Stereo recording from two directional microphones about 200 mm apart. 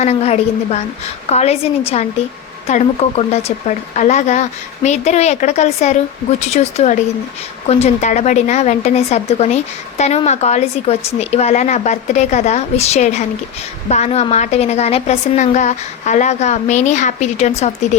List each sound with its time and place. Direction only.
0.0 s a woman's voice: 30° left (ahead or behind)